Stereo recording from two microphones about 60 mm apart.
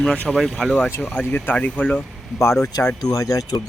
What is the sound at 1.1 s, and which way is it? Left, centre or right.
Speech, left.